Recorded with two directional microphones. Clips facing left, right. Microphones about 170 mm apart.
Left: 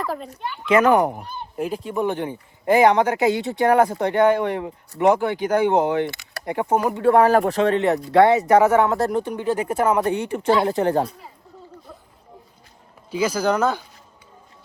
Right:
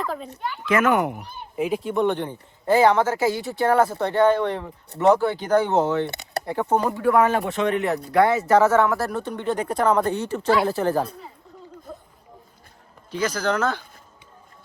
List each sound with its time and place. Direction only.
0.0 s a child's voice: centre (ahead or behind)
0.7 s speech: 35° left (ahead or behind)
1.5 s speech: centre (ahead or behind)
7.0 s speech: 30° left (ahead or behind)
13.1 s speech: 10° left (ahead or behind)